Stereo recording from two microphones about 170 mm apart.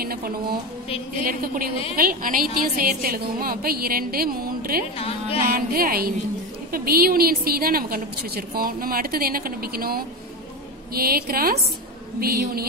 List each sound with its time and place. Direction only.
0.0 s a woman's voice: 60° right (ahead or behind)
2.0 s a woman's voice: 55° right (ahead or behind)
4.9 s music: 35° left (ahead or behind)
5.5 s a woman's voice: 60° right (ahead or behind)